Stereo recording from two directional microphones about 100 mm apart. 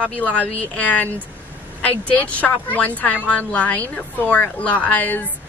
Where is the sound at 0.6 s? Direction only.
15° left (ahead or behind).